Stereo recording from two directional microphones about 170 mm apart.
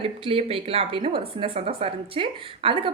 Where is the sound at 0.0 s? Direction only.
35° right (ahead or behind).